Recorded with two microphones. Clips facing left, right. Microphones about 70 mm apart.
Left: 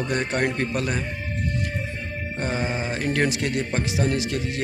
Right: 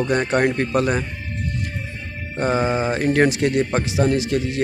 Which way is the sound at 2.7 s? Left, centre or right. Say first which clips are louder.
Right 6 dB; right.